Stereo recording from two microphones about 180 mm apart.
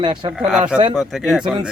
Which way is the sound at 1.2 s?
Centre (ahead or behind).